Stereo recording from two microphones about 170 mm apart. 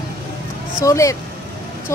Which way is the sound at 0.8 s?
20° left (ahead or behind).